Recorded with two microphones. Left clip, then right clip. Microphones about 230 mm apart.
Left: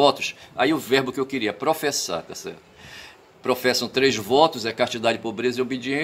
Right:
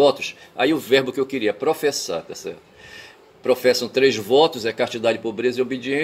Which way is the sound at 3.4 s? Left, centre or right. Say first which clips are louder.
Right 4 dB; centre.